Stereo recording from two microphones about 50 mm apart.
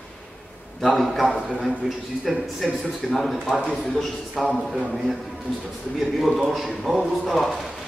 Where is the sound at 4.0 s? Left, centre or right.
Centre.